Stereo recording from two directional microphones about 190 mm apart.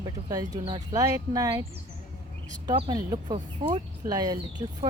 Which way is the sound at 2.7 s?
20° right (ahead or behind).